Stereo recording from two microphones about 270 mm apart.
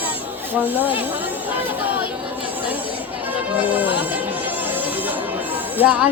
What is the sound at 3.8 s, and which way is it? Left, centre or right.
Speech, centre.